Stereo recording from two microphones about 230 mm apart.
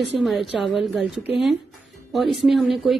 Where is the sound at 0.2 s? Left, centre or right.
Centre.